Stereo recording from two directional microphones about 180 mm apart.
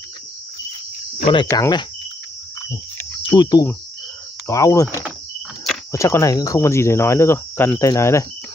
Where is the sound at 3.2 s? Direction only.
25° left (ahead or behind).